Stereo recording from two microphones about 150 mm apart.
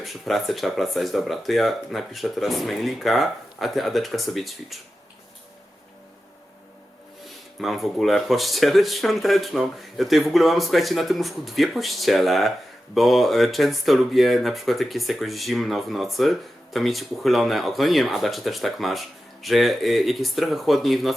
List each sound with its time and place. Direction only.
0.0 s speech: centre (ahead or behind)
7.6 s speech: centre (ahead or behind)